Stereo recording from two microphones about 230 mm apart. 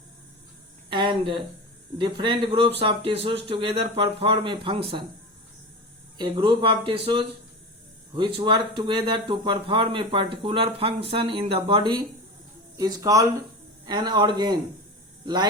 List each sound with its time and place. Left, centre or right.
0.9 s speech: right
6.1 s speech: centre